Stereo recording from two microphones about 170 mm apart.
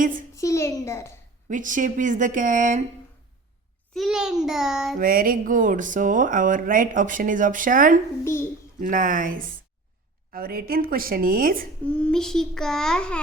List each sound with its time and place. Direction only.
0.3 s a child's voice: 15° left (ahead or behind)
1.5 s speech: 50° right (ahead or behind)
3.9 s a child's voice: centre (ahead or behind)
4.9 s speech: 55° right (ahead or behind)
8.2 s a child's voice: 15° left (ahead or behind)
8.8 s speech: 50° right (ahead or behind)
11.9 s a child's voice: 5° left (ahead or behind)